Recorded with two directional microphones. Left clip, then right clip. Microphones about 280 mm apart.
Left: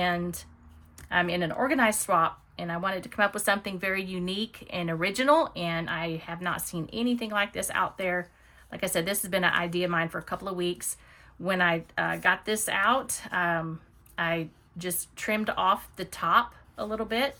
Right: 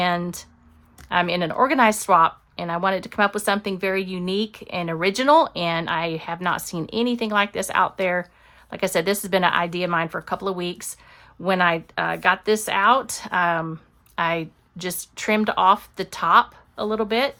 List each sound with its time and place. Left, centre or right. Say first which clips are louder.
0.0 s speech: right 6 dB; centre